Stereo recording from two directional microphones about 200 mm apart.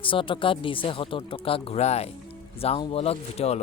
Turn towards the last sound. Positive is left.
turn(degrees=30)  # may be behind; listen again after turning